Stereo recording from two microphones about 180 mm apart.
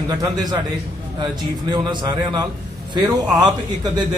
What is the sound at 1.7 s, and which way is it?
A man's voice, 25° right (ahead or behind).